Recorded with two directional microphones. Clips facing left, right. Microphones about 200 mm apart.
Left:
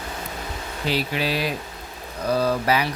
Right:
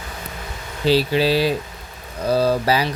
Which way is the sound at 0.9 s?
30° right (ahead or behind).